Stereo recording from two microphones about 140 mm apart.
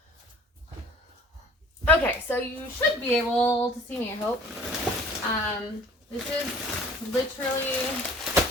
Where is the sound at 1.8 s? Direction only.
15° left (ahead or behind).